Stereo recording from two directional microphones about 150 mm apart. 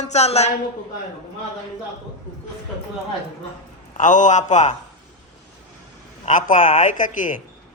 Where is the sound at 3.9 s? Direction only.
55° left (ahead or behind).